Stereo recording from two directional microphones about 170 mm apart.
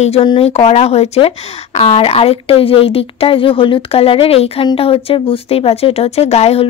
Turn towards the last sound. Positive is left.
turn(degrees=35)  # may be behind; listen again after turning